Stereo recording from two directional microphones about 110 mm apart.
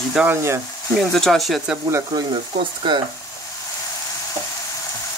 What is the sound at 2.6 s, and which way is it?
Speech, 50° right (ahead or behind).